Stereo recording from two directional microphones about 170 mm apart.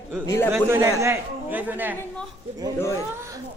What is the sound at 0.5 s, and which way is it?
A man's voice, 15° right (ahead or behind).